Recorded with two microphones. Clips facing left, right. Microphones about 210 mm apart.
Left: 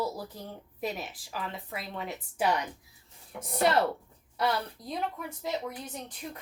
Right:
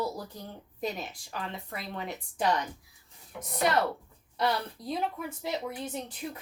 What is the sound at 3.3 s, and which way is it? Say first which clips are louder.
Speech: left 2 dB; 30° left (ahead or behind).